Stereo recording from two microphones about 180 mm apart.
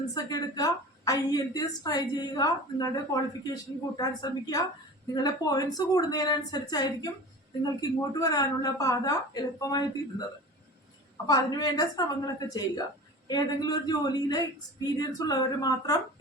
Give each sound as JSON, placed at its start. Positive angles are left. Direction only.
{"t": 0.1, "sound": "a woman's voice", "side_deg": 20}
{"t": 11.3, "sound": "a woman's voice", "side_deg": 20}
{"t": 13.2, "sound": "a woman's voice", "side_deg": 20}